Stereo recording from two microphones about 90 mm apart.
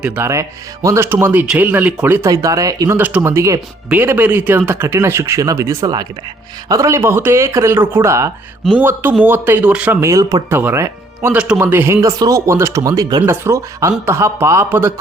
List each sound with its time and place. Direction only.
0.2 s speech: 35° right (ahead or behind)
2.2 s speech: 40° right (ahead or behind)
3.0 s speech: 15° right (ahead or behind)
3.2 s speech: 35° right (ahead or behind)
3.8 s speech: 20° right (ahead or behind); by 5.7 s 35° right (ahead or behind)
5.8 s speech: 50° right (ahead or behind)
6.7 s speech: 35° right (ahead or behind)
8.7 s speech: 20° right (ahead or behind)
10.0 s speech: 35° right (ahead or behind)
10.5 s speech: 25° right (ahead or behind)
11.3 s speech: 10° right (ahead or behind)
11.5 s speech: 25° right (ahead or behind); by 13.2 s 45° right (ahead or behind)
13.2 s speech: 25° right (ahead or behind)